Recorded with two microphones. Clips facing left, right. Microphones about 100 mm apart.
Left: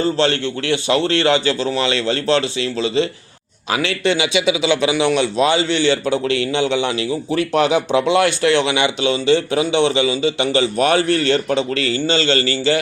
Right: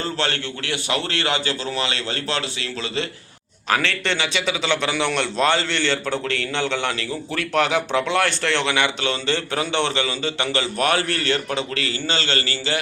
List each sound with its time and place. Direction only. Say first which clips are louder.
0.0 s a man's voice: left 8 dB; 25° left (ahead or behind)
5.6 s a man's voice: left 7 dB; 70° right (ahead or behind)
5.9 s a man's voice: left 6 dB; 15° left (ahead or behind); by 12.8 s 30° left (ahead or behind)